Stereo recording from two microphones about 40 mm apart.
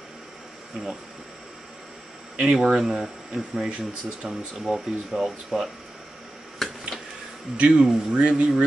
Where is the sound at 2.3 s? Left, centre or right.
Centre.